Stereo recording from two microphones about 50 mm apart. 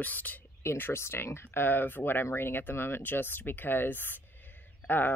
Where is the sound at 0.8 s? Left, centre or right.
Left.